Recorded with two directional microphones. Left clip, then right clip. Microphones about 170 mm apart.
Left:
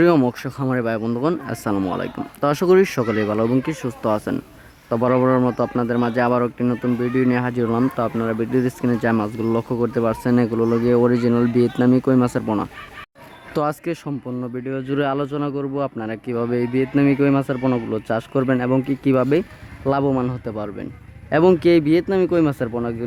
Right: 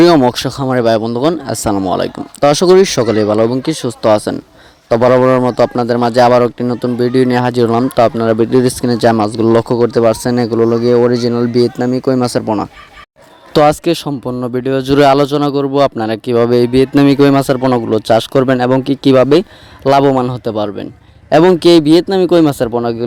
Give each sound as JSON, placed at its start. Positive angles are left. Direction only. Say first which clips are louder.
{"t": 0.3, "sound": "a man's voice", "louder": "right 10 dB", "side_deg": -40}
{"t": 13.5, "sound": "speech", "louder": "right 13 dB", "side_deg": -40}
{"t": 14.6, "sound": "a man's voice", "louder": "right 14 dB", "side_deg": -60}